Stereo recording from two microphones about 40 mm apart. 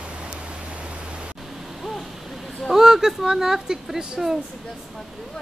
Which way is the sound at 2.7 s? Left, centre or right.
Centre.